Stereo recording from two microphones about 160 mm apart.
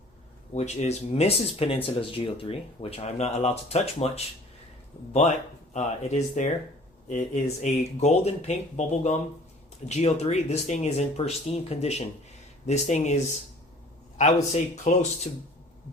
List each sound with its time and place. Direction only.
0.5 s speech: 45° left (ahead or behind)
5.7 s speech: 45° left (ahead or behind)
14.5 s speech: 45° left (ahead or behind)